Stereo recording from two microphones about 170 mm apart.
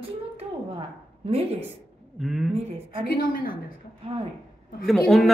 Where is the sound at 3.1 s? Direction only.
55° left (ahead or behind).